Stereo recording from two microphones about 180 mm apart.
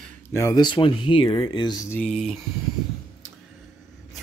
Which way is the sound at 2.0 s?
Centre (ahead or behind).